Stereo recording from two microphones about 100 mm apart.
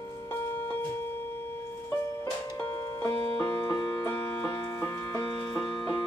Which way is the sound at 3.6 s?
45° left (ahead or behind).